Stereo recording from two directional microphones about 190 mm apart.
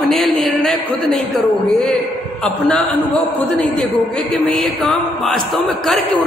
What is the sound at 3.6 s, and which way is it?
A woman's voice, 5° left (ahead or behind).